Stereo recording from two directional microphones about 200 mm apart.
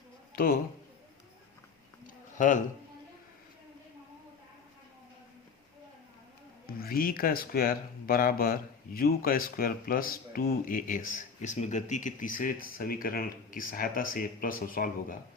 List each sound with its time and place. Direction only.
2.4 s speech: 40° left (ahead or behind)
6.7 s speech: 45° left (ahead or behind)